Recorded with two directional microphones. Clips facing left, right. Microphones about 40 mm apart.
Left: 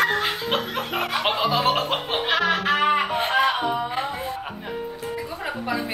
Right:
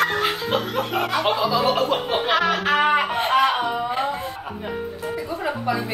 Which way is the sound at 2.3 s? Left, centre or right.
Centre.